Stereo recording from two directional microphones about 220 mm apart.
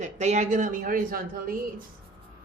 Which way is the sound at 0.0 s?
30° right (ahead or behind).